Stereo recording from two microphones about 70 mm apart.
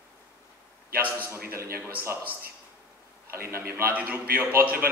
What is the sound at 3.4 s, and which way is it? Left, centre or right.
A man's voice, right.